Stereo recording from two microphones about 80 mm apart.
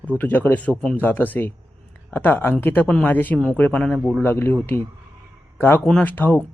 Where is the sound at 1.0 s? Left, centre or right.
Left.